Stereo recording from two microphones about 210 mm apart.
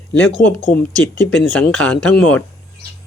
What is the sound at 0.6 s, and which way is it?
Speech, 40° left (ahead or behind).